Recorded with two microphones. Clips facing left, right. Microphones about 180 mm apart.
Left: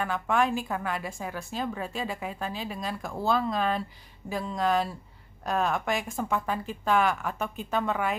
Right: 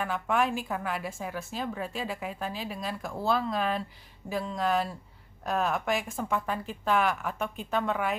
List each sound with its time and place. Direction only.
0.0 s a woman's voice: 5° right (ahead or behind)